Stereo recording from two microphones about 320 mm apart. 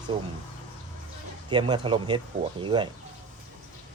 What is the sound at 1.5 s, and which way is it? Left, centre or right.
A man's voice, centre.